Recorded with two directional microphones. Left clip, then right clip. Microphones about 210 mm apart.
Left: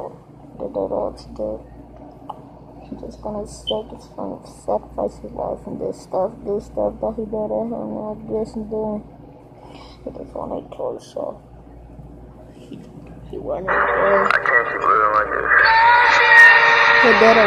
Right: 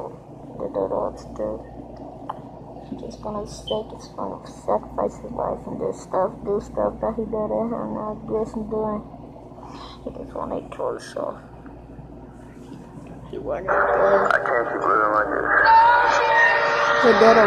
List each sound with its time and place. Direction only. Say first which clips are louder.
0.6 s speech: left 1 dB; 25° right (ahead or behind)
3.1 s speech: left 2 dB; 20° right (ahead or behind)
10.5 s speech: even; 20° right (ahead or behind)
13.7 s speech: left 1 dB; 10° left (ahead or behind)
15.9 s a sound: left 5 dB; 5° right (ahead or behind)
17.0 s speech: right 2 dB; centre (ahead or behind)